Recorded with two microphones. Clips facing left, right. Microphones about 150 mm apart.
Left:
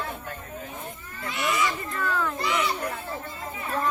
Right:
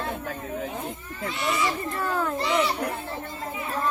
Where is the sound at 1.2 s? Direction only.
25° right (ahead or behind).